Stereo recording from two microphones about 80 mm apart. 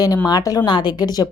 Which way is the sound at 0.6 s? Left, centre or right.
Left.